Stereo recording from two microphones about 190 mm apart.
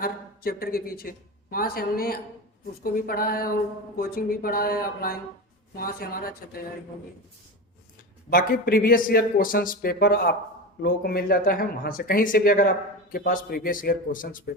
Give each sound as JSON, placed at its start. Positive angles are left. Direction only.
{"t": 0.0, "sound": "speech", "side_deg": 50}
{"t": 8.3, "sound": "speech", "side_deg": 50}